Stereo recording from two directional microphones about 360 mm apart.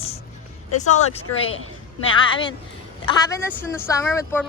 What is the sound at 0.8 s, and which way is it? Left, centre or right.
Speech, centre.